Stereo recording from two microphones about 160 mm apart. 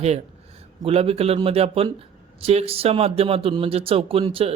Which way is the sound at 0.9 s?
40° right (ahead or behind).